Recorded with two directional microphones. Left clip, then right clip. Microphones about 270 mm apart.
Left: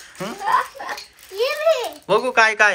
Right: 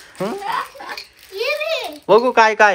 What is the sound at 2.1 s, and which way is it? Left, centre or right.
Speech, centre.